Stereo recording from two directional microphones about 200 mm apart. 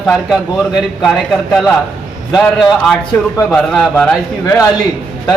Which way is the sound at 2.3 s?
Centre (ahead or behind).